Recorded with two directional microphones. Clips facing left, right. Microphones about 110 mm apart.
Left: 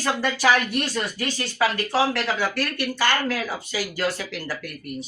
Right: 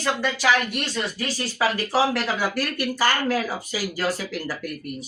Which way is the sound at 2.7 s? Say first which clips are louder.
Even; 40° right (ahead or behind).